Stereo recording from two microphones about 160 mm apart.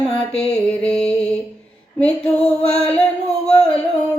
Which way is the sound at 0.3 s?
5° left (ahead or behind).